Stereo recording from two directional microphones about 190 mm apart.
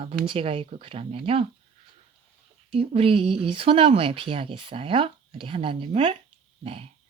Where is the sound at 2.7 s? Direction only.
30° right (ahead or behind).